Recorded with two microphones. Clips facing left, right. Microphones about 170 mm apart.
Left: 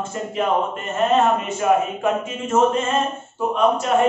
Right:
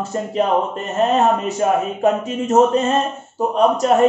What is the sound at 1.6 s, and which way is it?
A man's voice, 35° right (ahead or behind).